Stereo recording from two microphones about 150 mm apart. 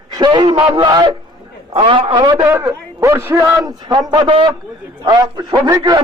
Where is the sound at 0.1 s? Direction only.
30° right (ahead or behind).